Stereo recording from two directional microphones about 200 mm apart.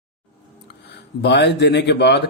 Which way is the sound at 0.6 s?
55° left (ahead or behind).